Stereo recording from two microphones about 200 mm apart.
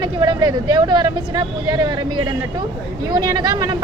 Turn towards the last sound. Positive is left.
turn(degrees=-20)  # may be behind; listen again after turning